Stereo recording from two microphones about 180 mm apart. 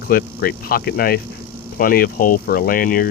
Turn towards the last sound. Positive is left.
turn(degrees=55)  # may be behind; listen again after turning